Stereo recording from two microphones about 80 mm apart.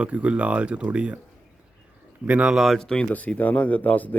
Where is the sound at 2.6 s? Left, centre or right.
Centre; by 4.2 s left.